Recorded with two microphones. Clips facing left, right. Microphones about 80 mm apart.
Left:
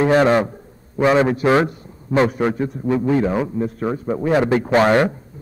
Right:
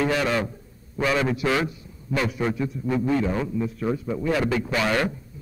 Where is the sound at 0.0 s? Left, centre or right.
Left.